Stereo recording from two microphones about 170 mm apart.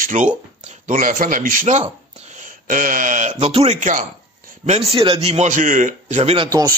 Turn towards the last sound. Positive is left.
turn(degrees=-20)  # may be behind; listen again after turning